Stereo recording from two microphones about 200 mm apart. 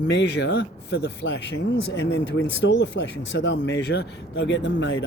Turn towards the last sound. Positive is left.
turn(degrees=60)  # may be behind; listen again after turning